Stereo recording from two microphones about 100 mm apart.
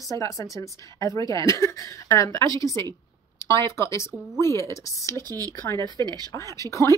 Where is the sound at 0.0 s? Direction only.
35° left (ahead or behind).